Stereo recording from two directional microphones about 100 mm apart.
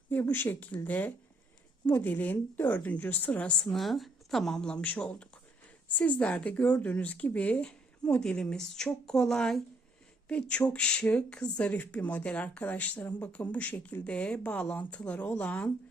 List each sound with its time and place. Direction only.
0.1 s speech: 20° left (ahead or behind)
3.7 s a woman's voice: centre (ahead or behind)